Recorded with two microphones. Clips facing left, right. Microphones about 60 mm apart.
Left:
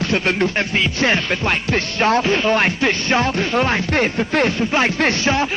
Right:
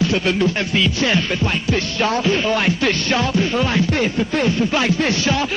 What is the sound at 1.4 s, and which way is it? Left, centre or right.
Music, left.